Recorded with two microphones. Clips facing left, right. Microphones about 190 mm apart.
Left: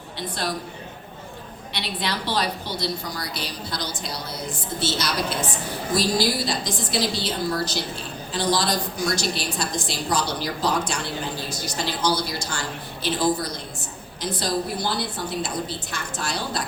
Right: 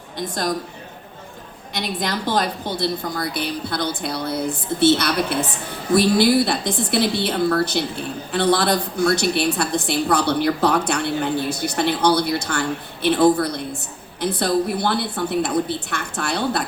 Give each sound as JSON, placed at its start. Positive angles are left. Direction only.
{"t": 0.2, "sound": "a man's voice", "side_deg": -45}
{"t": 1.7, "sound": "a woman's voice", "side_deg": -45}